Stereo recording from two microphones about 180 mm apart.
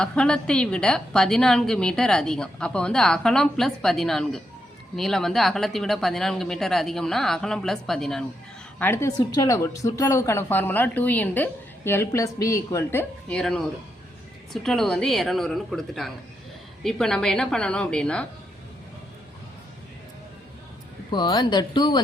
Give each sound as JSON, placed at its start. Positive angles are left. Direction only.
{"t": 0.0, "sound": "a woman's voice", "side_deg": 5}
{"t": 8.8, "sound": "a woman's voice", "side_deg": 15}
{"t": 21.1, "sound": "speech", "side_deg": 25}